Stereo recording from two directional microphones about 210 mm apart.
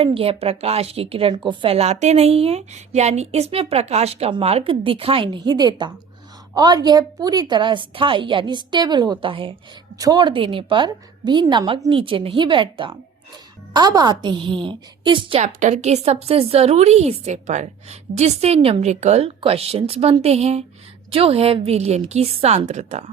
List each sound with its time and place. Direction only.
0.0 s a woman's voice: 25° right (ahead or behind)